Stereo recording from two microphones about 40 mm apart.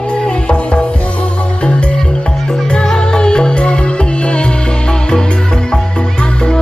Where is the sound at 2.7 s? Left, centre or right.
Centre.